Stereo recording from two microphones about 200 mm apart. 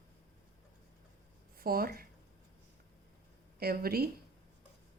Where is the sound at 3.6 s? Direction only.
50° right (ahead or behind).